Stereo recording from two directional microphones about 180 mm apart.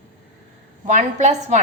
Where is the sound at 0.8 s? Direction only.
40° right (ahead or behind).